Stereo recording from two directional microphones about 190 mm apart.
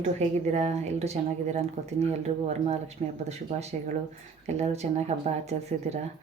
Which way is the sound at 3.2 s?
35° right (ahead or behind).